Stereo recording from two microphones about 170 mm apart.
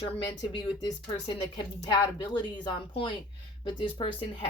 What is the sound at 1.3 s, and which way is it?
Speech, 25° left (ahead or behind).